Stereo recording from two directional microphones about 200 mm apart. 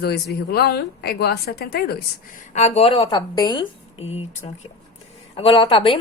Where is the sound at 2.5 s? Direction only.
30° left (ahead or behind).